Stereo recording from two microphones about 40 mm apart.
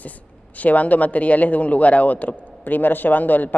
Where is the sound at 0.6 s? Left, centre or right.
Left.